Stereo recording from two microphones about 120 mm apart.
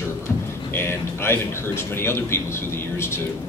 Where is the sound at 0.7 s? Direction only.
20° left (ahead or behind).